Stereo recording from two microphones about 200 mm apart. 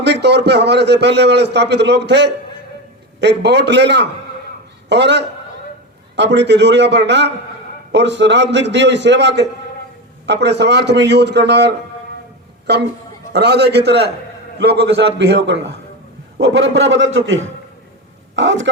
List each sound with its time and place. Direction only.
0.0 s a man's voice: 60° right (ahead or behind)
13.3 s a man's voice: 55° right (ahead or behind)